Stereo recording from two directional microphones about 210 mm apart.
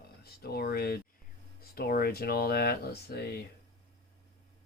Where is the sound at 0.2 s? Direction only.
50° left (ahead or behind).